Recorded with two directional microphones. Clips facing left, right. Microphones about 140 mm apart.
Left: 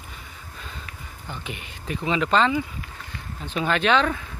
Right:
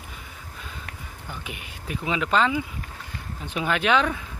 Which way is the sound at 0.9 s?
70° right (ahead or behind).